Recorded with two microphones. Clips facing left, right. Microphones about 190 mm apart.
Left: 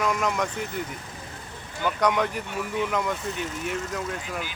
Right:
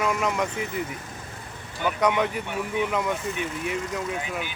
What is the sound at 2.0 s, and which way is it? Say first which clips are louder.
Speech: right 1 dB; 10° right (ahead or behind).